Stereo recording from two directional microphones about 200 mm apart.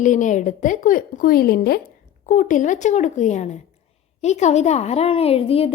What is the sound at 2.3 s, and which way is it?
A woman's voice, 40° left (ahead or behind).